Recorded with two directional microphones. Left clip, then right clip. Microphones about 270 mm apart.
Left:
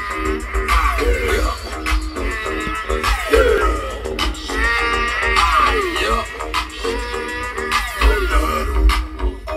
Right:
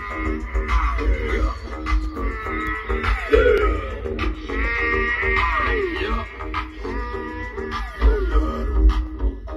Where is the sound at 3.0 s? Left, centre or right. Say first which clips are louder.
Left 3 dB; left.